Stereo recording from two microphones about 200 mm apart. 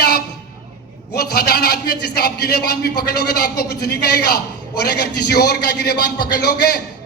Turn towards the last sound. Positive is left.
turn(degrees=55)  # may be behind; listen again after turning